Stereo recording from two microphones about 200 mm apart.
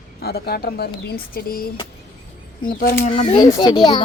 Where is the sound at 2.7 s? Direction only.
45° left (ahead or behind).